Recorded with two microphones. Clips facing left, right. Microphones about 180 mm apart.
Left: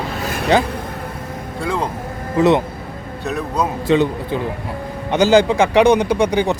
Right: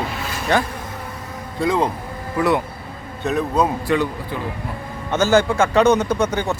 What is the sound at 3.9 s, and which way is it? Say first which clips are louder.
Speech: left 5 dB; 25° left (ahead or behind).